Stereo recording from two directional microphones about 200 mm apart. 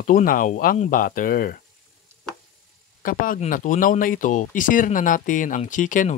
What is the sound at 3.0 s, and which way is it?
Speech, 45° left (ahead or behind).